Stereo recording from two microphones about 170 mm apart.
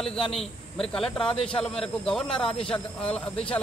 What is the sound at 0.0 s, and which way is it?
A man's voice, 5° left (ahead or behind).